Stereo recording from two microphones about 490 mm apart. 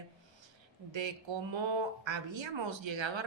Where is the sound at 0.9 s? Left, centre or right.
Right.